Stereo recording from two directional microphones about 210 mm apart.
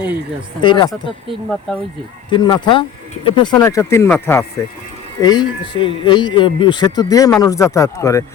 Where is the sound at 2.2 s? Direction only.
20° left (ahead or behind).